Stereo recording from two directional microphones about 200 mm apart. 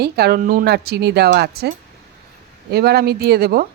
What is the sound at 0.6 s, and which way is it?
Speech, 55° right (ahead or behind).